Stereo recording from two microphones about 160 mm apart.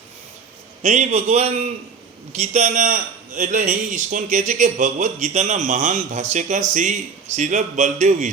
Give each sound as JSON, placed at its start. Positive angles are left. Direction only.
{"t": 0.8, "sound": "a man's voice", "side_deg": -50}